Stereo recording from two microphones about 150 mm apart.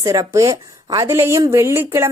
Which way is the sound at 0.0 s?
25° right (ahead or behind).